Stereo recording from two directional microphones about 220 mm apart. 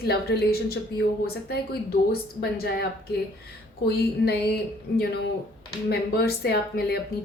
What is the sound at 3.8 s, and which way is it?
A woman's voice, 45° left (ahead or behind).